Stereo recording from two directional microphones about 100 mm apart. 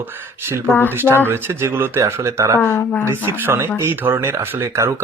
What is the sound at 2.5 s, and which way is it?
Speech, 25° left (ahead or behind).